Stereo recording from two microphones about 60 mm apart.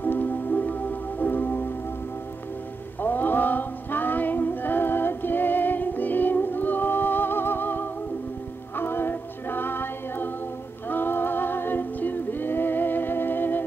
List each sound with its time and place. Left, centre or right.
0.0 s music: left
3.0 s music: left